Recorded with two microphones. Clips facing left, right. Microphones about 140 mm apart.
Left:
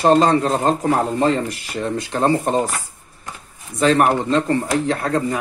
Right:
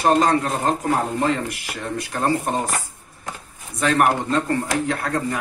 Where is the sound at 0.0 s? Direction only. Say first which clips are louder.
Left 3 dB; 30° left (ahead or behind).